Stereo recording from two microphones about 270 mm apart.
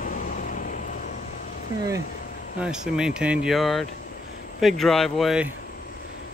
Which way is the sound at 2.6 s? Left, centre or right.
Centre.